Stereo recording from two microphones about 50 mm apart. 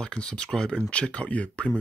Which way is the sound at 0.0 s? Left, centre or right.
Centre.